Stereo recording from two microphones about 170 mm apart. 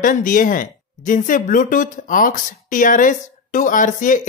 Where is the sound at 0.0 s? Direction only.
50° left (ahead or behind).